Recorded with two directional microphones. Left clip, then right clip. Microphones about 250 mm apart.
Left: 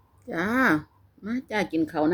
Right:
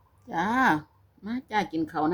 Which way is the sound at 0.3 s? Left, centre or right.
Centre.